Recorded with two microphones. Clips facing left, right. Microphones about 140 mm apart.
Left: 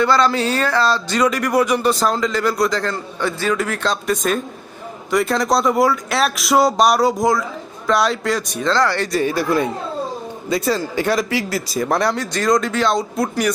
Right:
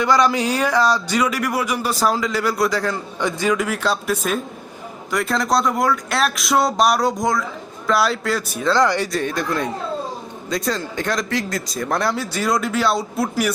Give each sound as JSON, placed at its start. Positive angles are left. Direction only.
{"t": 0.0, "sound": "speech", "side_deg": -15}
{"t": 8.8, "sound": "speech", "side_deg": -15}
{"t": 9.1, "sound": "speech", "side_deg": 5}